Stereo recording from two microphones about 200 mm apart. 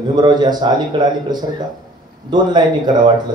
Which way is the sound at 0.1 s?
20° right (ahead or behind).